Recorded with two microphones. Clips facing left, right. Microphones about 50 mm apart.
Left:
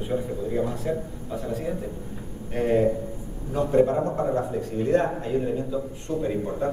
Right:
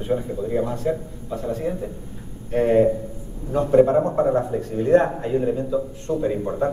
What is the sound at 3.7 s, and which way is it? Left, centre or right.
A man's voice, right.